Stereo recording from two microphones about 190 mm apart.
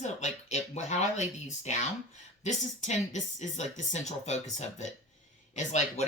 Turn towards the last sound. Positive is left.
turn(degrees=35)  # may be behind; listen again after turning